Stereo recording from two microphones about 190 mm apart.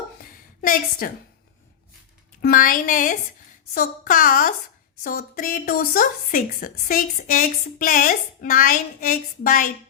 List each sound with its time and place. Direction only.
0.6 s a woman's voice: 50° left (ahead or behind)
2.4 s a woman's voice: 45° left (ahead or behind)